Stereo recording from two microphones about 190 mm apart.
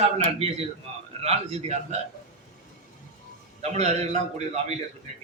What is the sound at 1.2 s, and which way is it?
Speech, 35° right (ahead or behind).